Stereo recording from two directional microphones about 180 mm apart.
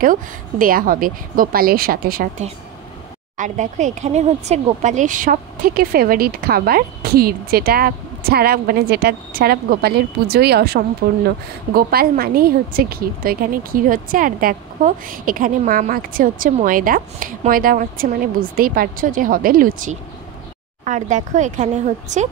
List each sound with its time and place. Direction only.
0.0 s speech: 50° right (ahead or behind)
3.3 s speech: 45° right (ahead or behind)